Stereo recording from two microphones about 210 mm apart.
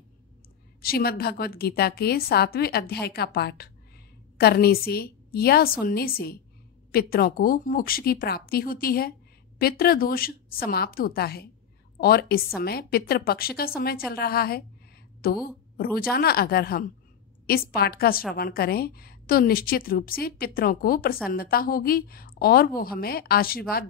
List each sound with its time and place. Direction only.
0.8 s a woman's voice: 45° left (ahead or behind)